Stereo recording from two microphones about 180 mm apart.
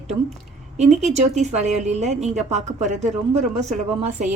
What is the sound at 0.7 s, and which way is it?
Speech, 40° right (ahead or behind).